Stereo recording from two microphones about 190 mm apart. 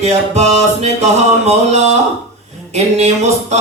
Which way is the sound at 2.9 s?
35° right (ahead or behind).